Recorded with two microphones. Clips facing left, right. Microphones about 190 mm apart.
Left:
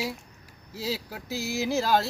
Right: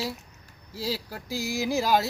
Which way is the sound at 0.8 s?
5° right (ahead or behind).